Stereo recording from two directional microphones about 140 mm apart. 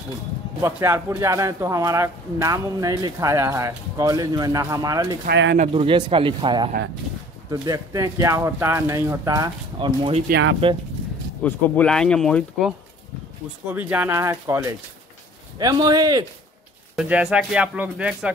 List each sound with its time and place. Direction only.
0.6 s speech: 20° right (ahead or behind)
5.7 s speech: 40° right (ahead or behind)
7.6 s speech: 25° right (ahead or behind); by 10.8 s 40° right (ahead or behind)
11.4 s speech: 10° left (ahead or behind)
13.7 s speech: 10° right (ahead or behind); by 16.3 s 30° right (ahead or behind)
16.9 s speech: 5° right (ahead or behind)